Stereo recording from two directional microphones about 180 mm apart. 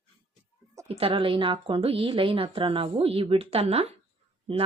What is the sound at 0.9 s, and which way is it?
A woman's voice, 30° right (ahead or behind).